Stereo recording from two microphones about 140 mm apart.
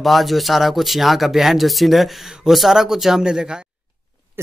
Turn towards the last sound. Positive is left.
turn(degrees=-5)  # may be behind; listen again after turning